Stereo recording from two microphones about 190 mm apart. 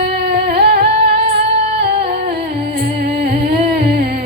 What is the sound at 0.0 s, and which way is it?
Music, 60° right (ahead or behind).